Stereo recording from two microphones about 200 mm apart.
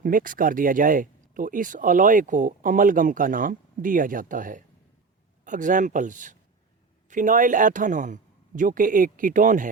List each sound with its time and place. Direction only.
0.0 s speech: 45° right (ahead or behind)